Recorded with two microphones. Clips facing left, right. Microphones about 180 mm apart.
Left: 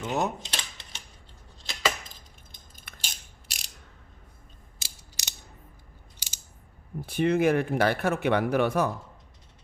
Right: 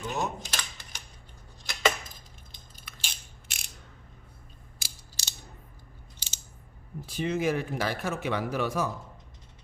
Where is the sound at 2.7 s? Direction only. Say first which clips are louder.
Even; 50° left (ahead or behind).